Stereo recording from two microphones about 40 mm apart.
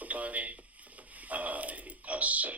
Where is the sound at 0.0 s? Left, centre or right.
Right.